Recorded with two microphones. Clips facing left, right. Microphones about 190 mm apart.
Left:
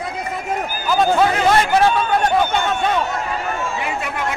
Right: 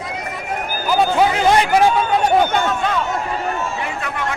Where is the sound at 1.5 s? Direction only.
15° right (ahead or behind).